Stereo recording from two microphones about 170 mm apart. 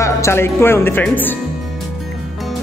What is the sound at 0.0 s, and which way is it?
A man's voice, 15° left (ahead or behind).